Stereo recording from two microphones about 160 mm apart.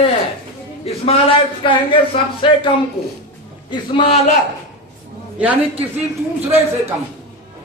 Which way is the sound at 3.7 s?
35° left (ahead or behind).